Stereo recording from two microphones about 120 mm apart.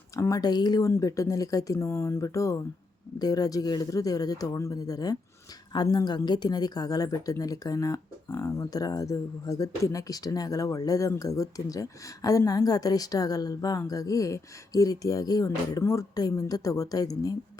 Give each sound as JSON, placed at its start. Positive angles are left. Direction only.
{"t": 0.2, "sound": "a woman's voice", "side_deg": 30}